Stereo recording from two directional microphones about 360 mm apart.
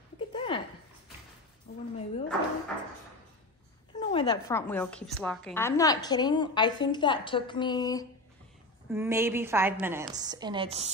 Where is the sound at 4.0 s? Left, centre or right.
Centre.